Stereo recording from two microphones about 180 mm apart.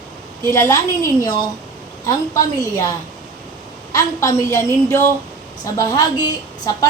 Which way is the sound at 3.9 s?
15° left (ahead or behind).